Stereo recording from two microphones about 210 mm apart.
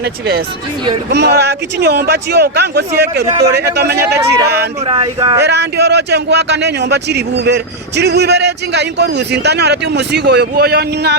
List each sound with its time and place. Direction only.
0.0 s a man's voice: 50° right (ahead or behind)
4.9 s speech: 25° right (ahead or behind)
5.4 s a man's voice: 55° right (ahead or behind)